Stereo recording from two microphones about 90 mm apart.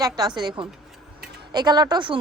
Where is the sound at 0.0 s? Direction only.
50° right (ahead or behind).